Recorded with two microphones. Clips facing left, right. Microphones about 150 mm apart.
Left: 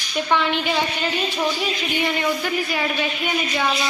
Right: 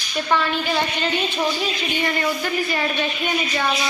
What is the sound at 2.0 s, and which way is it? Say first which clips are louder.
A woman's voice: left 1 dB; 10° left (ahead or behind).